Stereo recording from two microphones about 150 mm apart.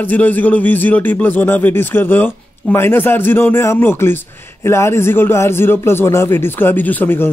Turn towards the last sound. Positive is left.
turn(degrees=15)  # may be behind; listen again after turning